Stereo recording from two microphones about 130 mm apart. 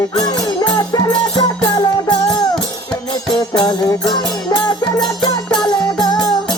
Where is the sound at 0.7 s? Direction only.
30° left (ahead or behind).